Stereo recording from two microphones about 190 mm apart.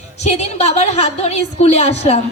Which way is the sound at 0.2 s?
35° left (ahead or behind).